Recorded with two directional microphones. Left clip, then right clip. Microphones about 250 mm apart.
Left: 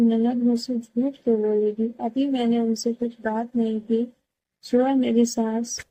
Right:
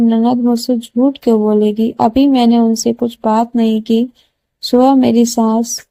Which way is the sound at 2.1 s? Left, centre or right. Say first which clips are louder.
Right 9 dB; right.